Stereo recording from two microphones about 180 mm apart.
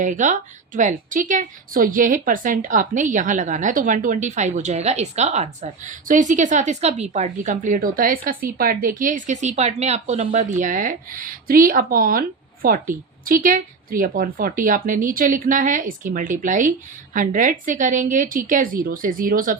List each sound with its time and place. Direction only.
0.0 s a woman's voice: 45° right (ahead or behind)